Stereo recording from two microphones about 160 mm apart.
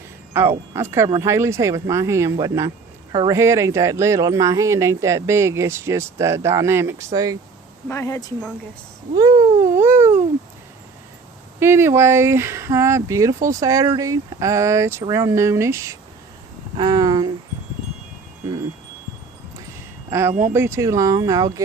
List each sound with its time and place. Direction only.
0.7 s speech: 15° right (ahead or behind)
7.9 s speech: 20° left (ahead or behind)
9.1 s cat: 25° right (ahead or behind)
11.6 s speech: 15° right (ahead or behind)
20.1 s speech: 15° right (ahead or behind)